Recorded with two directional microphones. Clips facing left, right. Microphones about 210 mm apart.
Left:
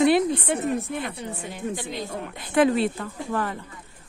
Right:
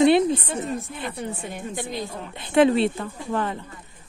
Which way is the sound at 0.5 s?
60° left (ahead or behind).